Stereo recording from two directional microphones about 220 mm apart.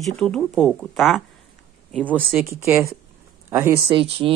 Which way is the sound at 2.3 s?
10° right (ahead or behind).